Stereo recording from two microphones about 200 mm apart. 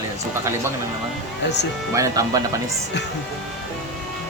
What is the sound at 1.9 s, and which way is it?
Speech, 15° right (ahead or behind).